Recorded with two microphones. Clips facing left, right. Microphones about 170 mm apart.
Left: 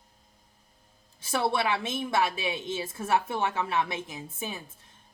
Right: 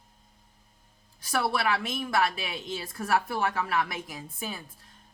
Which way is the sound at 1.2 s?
25° left (ahead or behind).